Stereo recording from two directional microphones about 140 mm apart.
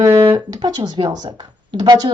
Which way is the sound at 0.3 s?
30° right (ahead or behind).